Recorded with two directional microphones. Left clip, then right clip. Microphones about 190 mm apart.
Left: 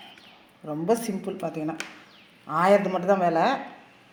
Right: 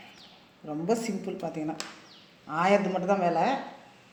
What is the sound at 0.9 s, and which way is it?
Speech, 55° left (ahead or behind).